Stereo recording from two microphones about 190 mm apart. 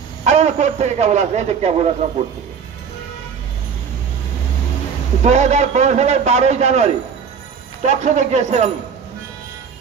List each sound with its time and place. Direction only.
0.2 s a man's voice: 35° right (ahead or behind)
5.2 s a man's voice: 35° right (ahead or behind)